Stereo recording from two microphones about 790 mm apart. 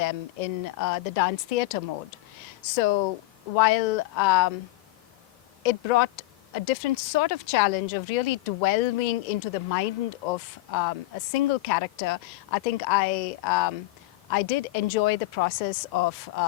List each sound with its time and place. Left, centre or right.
0.0 s speech: left
5.6 s speech: left